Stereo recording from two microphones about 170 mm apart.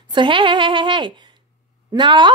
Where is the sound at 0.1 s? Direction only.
30° right (ahead or behind).